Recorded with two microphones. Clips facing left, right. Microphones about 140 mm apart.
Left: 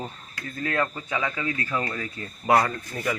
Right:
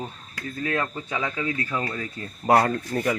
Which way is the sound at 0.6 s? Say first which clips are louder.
Even; 15° right (ahead or behind).